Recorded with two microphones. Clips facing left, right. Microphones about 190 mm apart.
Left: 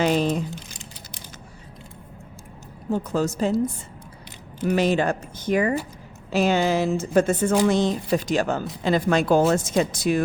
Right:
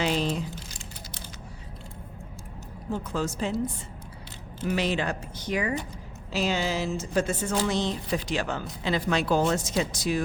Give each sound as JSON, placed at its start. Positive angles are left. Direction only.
{"t": 0.0, "sound": "a sound", "side_deg": 50}
{"t": 2.9, "sound": "speech", "side_deg": 45}
{"t": 4.6, "sound": "a woman's voice", "side_deg": 45}